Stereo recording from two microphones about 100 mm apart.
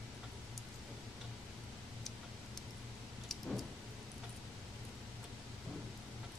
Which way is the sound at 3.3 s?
5° left (ahead or behind).